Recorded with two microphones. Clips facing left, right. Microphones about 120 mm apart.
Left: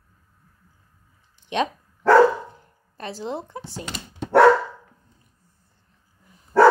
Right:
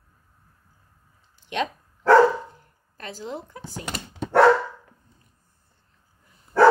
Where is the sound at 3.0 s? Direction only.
25° left (ahead or behind).